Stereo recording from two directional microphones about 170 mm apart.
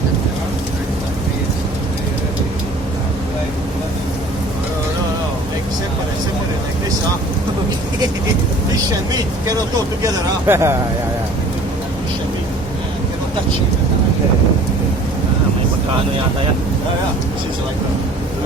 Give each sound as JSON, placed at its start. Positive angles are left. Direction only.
{"t": 9.1, "sound": "speech", "side_deg": -20}